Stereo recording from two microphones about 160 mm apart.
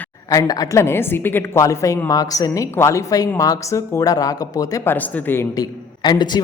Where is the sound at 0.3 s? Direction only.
20° left (ahead or behind).